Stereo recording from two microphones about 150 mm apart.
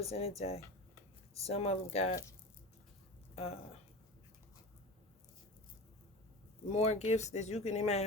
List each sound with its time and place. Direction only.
0.0 s speech: 40° left (ahead or behind)
3.3 s speech: 40° left (ahead or behind)
6.7 s speech: 45° left (ahead or behind)